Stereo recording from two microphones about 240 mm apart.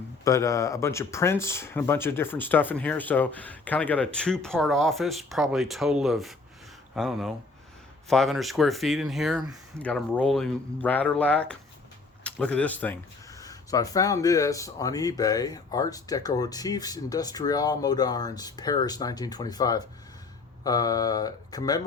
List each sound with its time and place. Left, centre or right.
0.3 s speech: centre